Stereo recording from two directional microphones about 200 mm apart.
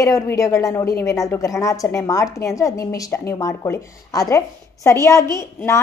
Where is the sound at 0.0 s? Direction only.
15° left (ahead or behind).